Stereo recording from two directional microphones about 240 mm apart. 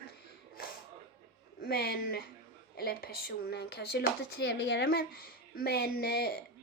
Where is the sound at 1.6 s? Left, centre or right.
Left.